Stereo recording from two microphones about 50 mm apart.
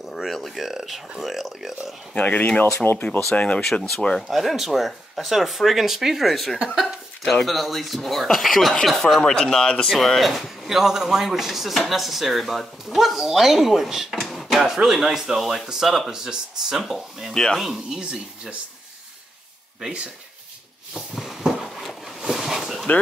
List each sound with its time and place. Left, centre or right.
0.1 s speech: centre
2.1 s speech: left
4.2 s speech: centre
6.7 s a sound: centre
7.4 s speech: centre
9.9 s speech: centre
14.2 s drawer open or close: centre
14.8 s speech: centre
17.3 s speech: centre
17.6 s speech: centre
21.1 s a sound: centre